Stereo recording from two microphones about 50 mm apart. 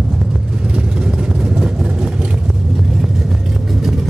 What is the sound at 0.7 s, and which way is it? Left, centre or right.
Vehicle, centre.